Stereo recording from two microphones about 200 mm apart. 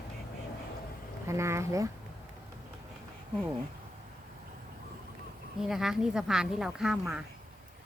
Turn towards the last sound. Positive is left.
turn(degrees=-5)  # may be behind; listen again after turning